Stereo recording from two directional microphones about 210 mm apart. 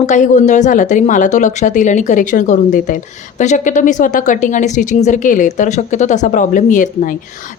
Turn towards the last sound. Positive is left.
turn(degrees=40)  # may be behind; listen again after turning